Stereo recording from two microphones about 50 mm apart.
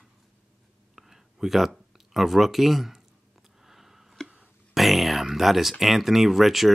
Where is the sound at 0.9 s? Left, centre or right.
Centre.